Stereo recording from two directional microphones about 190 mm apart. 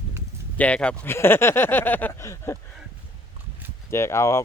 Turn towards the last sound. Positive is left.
turn(degrees=15)  # may be behind; listen again after turning